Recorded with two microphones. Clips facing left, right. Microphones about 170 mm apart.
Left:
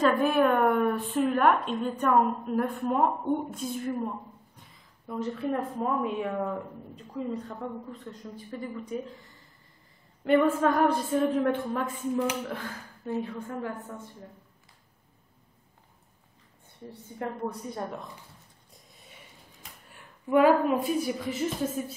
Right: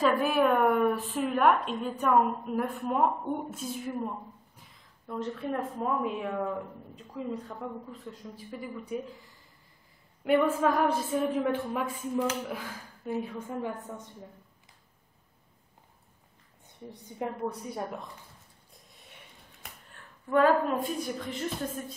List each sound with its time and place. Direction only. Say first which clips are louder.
0.0 s a woman's voice: left 2 dB; 5° right (ahead or behind)
10.2 s a woman's voice: left 2 dB; centre (ahead or behind)
16.9 s a woman's voice: even; 15° right (ahead or behind)
17.4 s a woman's voice: even; 5° right (ahead or behind)
18.9 s a sound: left 1 dB; centre (ahead or behind)
19.9 s a woman's voice: left 3 dB; 10° left (ahead or behind)